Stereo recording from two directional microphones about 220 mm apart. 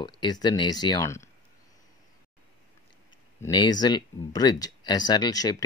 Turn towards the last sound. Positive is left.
turn(degrees=15)  # may be behind; listen again after turning